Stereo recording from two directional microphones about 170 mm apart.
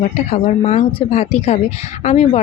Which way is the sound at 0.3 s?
35° left (ahead or behind).